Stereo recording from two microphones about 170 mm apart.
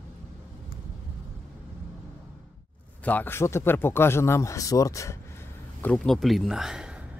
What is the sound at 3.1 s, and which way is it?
Speech, 10° left (ahead or behind).